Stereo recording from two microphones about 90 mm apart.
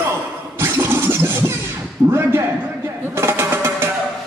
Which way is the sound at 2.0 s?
30° right (ahead or behind).